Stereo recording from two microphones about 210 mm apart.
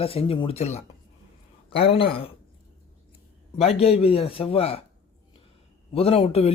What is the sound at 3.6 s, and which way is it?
Speech, 30° left (ahead or behind).